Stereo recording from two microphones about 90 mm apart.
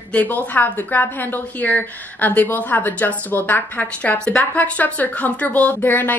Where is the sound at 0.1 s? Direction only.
15° left (ahead or behind).